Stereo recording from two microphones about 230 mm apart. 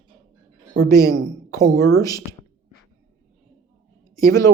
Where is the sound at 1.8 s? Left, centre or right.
Centre.